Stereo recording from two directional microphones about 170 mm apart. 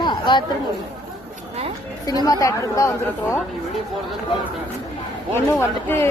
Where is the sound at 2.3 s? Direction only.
20° left (ahead or behind).